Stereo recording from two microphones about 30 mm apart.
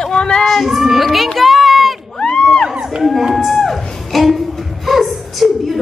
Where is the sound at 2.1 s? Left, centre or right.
Left.